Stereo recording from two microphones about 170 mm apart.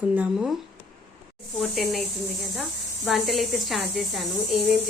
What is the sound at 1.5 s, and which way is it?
Speech, centre (ahead or behind).